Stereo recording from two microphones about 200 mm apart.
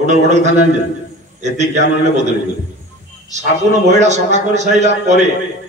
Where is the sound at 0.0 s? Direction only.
35° right (ahead or behind).